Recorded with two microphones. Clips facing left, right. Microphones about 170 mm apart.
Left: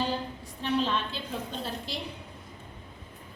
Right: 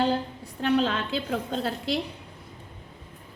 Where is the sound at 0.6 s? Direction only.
90° right.